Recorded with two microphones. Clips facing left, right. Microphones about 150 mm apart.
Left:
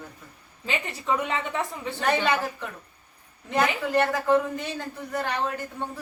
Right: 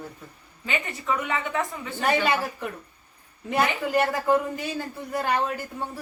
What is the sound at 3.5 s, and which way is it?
A man's voice, 10° right (ahead or behind).